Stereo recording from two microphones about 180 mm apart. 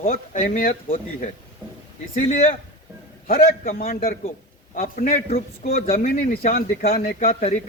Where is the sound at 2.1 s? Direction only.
45° left (ahead or behind).